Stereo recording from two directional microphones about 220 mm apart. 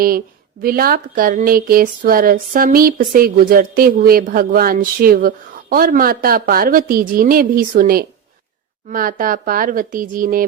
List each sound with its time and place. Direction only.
0.6 s speech: 40° right (ahead or behind)